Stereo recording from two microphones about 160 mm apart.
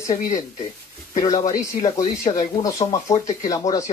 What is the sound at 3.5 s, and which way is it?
Speech, 20° left (ahead or behind).